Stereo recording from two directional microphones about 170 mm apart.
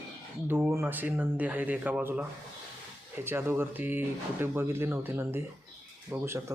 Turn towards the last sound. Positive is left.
turn(degrees=-15)  # may be behind; listen again after turning